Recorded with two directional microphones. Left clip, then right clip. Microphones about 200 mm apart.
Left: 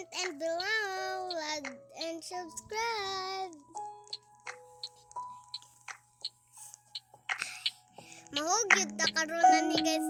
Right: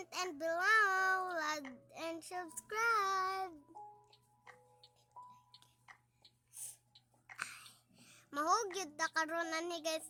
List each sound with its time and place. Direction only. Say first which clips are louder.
0.0 s a sound: left 4 dB; 10° right (ahead or behind)
2.6 s child singing: right 1 dB; 10° right (ahead or behind)
3.8 s music: left 13 dB; 45° left (ahead or behind)
7.3 s speech: left 8 dB; 5° right (ahead or behind)